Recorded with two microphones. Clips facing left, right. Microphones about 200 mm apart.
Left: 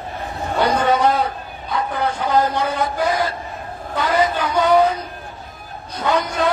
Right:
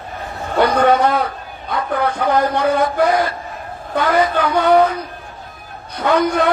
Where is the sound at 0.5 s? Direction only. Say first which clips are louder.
Right 4 dB; 55° right (ahead or behind).